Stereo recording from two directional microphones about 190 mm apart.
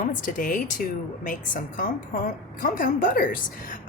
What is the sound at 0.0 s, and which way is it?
A woman's voice, 45° left (ahead or behind).